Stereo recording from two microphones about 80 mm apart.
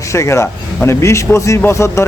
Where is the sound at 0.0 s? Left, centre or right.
Left.